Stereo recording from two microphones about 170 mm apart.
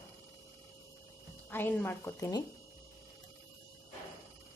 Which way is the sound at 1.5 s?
10° left (ahead or behind).